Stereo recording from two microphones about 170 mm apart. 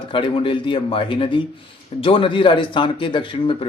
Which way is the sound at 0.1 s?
30° left (ahead or behind).